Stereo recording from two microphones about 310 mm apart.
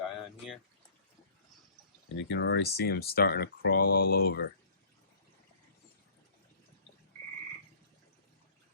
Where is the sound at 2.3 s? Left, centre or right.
Left.